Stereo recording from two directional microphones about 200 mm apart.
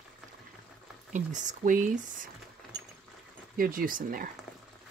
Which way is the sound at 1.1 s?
40° right (ahead or behind).